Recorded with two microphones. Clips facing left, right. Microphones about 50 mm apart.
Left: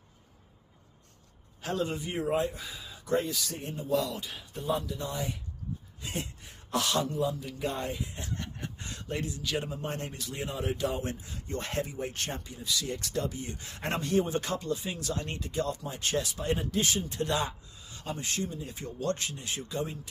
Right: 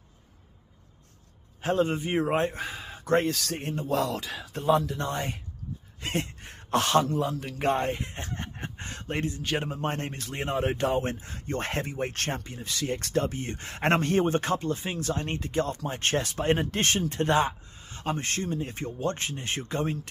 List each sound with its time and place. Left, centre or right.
1.6 s a man's voice: right
17.1 s a man's voice: right
18.9 s a man's voice: right